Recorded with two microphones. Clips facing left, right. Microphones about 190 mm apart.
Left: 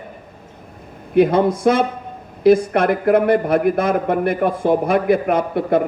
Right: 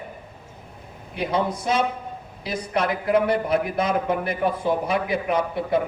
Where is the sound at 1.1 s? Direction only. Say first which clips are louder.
Left 10 dB; 55° left (ahead or behind).